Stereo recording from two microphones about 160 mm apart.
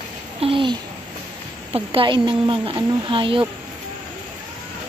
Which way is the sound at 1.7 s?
35° right (ahead or behind).